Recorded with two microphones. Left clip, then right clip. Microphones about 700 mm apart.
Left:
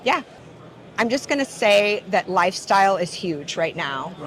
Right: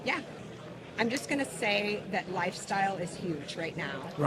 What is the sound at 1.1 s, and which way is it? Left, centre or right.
A woman's voice, left.